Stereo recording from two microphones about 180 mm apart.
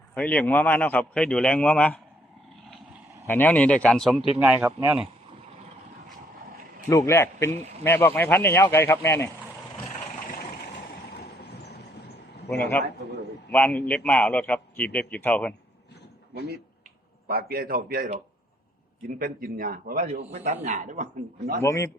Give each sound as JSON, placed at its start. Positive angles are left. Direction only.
{"t": 0.1, "sound": "a man's voice", "side_deg": 10}
{"t": 3.2, "sound": "a man's voice", "side_deg": 10}
{"t": 4.4, "sound": "speech", "side_deg": -10}
{"t": 6.9, "sound": "a man's voice", "side_deg": 15}
{"t": 11.1, "sound": "vehicle", "side_deg": 65}
{"t": 13.5, "sound": "a man's voice", "side_deg": 10}
{"t": 17.2, "sound": "a man's voice", "side_deg": -55}
{"t": 20.3, "sound": "speech", "side_deg": -40}
{"t": 21.6, "sound": "a man's voice", "side_deg": 15}